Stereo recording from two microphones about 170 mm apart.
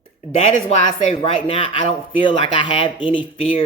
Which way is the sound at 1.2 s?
35° left (ahead or behind).